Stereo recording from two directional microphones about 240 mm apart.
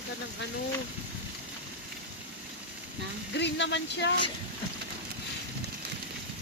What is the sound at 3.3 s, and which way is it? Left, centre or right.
Speech, left.